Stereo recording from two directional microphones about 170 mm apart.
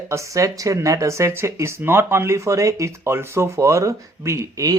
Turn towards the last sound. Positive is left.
turn(degrees=-20)  # may be behind; listen again after turning